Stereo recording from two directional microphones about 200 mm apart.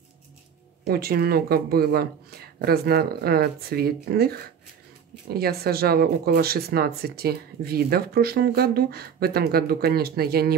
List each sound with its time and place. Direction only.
0.8 s speech: 50° right (ahead or behind)